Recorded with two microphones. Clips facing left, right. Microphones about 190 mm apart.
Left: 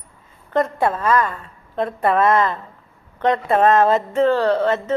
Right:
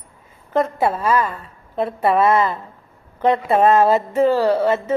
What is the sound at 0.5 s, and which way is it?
A woman's voice, 5° right (ahead or behind).